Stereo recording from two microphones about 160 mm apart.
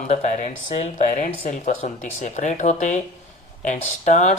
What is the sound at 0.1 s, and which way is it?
Speech, 50° left (ahead or behind).